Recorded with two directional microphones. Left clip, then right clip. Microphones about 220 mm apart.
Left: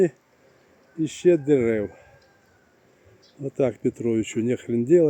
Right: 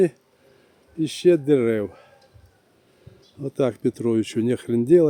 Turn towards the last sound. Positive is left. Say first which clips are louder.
# right 2 dB
turn(degrees=-15)  # may be behind; listen again after turning